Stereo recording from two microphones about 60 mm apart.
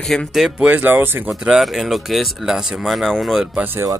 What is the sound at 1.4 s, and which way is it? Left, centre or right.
Speech, centre.